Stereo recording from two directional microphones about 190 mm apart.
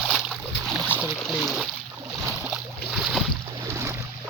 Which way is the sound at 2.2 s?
10° right (ahead or behind).